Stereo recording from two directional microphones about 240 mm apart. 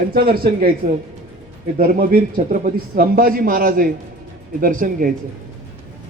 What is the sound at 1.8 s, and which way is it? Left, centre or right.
A man's voice, right.